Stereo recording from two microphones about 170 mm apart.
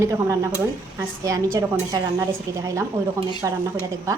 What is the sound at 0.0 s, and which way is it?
Speech, 20° right (ahead or behind).